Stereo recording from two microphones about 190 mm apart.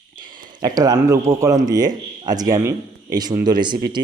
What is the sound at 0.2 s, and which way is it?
Speech, 25° right (ahead or behind).